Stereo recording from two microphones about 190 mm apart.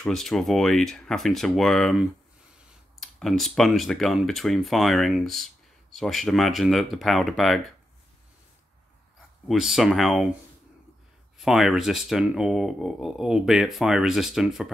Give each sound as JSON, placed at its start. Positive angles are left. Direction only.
{"t": 0.0, "sound": "speech", "side_deg": 0}
{"t": 9.5, "sound": "speech", "side_deg": 0}
{"t": 11.3, "sound": "speech", "side_deg": 0}